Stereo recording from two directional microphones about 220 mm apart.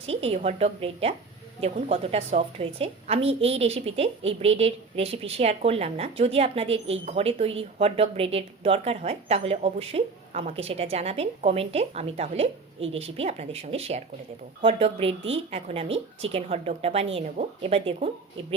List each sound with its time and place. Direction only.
0.1 s a woman's voice: 25° right (ahead or behind)